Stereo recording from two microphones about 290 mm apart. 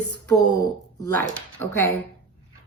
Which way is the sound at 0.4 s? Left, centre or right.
Centre.